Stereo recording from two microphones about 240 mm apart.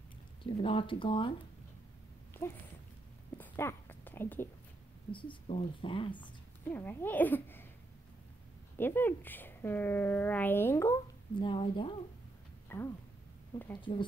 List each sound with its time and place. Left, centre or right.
0.4 s speech: left
3.3 s a sound: centre
5.1 s speech: left
6.6 s speech: centre
8.7 s speech: centre
12.6 s a sound: centre
13.7 s speech: centre